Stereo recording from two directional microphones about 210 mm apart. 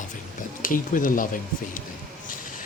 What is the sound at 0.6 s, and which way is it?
Speech, 40° left (ahead or behind).